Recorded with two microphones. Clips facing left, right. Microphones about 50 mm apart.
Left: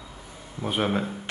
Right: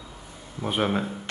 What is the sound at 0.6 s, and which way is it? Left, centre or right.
Speech, centre.